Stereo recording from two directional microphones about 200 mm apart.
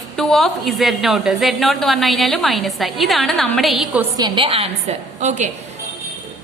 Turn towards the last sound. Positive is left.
turn(degrees=-35)  # may be behind; listen again after turning